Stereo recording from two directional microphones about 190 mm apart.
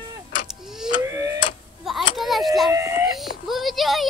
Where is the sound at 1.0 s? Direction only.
15° right (ahead or behind).